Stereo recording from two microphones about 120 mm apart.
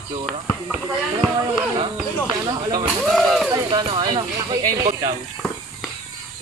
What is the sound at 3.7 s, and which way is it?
Speech, 40° right (ahead or behind).